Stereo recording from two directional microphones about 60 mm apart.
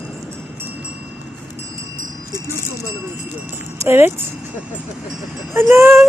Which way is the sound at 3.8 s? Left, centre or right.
Right.